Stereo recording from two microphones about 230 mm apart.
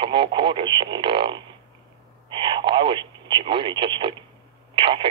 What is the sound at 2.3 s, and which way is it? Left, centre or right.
Speech, centre.